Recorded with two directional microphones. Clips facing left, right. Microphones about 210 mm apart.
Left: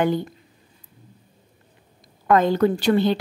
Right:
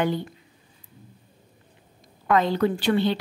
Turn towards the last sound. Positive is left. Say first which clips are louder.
# left 3 dB
turn(degrees=45)  # may be behind; listen again after turning